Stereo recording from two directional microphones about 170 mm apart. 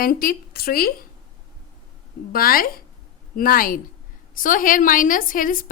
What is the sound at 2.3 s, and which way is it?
A woman's voice, 60° left (ahead or behind).